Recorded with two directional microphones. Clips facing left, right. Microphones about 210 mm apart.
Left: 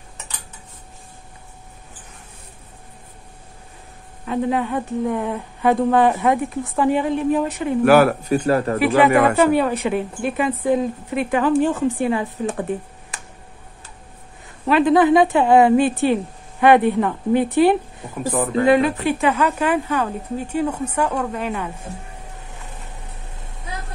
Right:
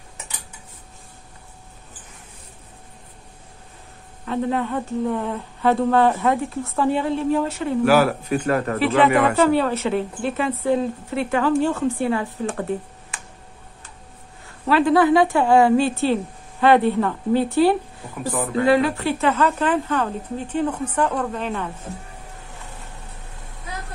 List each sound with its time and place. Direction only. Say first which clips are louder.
4.3 s speech: left 2 dB; 15° left (ahead or behind)
7.8 s speech: left 4 dB; 55° left (ahead or behind)
8.3 s speech: left 3 dB; 35° left (ahead or behind)
8.7 s speech: left 1 dB; 15° left (ahead or behind)
9.1 s speech: left 3 dB; 50° left (ahead or behind)
9.4 s speech: left 1 dB; 15° left (ahead or behind)
13.1 s a sound: left 1 dB; 40° left (ahead or behind)
14.7 s speech: left 2 dB; 20° left (ahead or behind)